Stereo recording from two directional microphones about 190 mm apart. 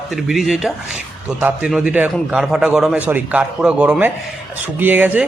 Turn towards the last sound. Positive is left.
turn(degrees=-10)  # may be behind; listen again after turning